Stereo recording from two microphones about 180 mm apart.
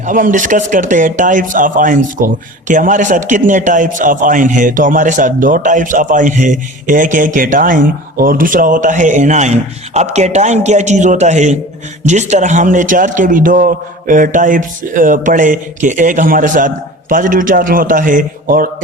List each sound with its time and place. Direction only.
0.0 s a man's voice: 45° right (ahead or behind)